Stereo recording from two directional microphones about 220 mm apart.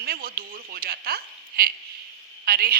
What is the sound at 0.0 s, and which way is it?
A woman's voice, 45° right (ahead or behind).